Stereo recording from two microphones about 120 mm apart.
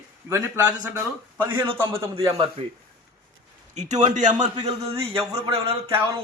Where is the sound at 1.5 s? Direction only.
45° right (ahead or behind).